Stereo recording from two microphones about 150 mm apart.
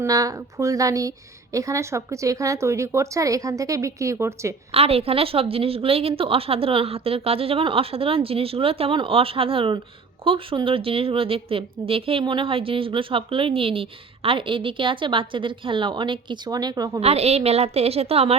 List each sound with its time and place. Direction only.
0.0 s speech: 25° right (ahead or behind)
4.7 s speech: 40° right (ahead or behind)
17.0 s a woman's voice: 45° right (ahead or behind)